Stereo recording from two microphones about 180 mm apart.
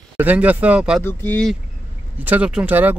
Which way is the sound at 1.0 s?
10° left (ahead or behind).